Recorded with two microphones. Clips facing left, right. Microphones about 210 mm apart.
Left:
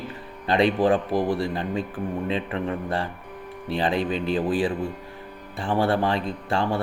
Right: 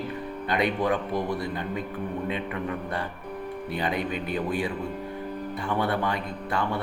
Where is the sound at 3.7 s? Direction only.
30° left (ahead or behind).